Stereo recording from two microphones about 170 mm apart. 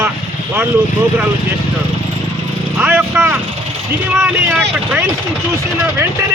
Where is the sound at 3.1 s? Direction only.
15° right (ahead or behind).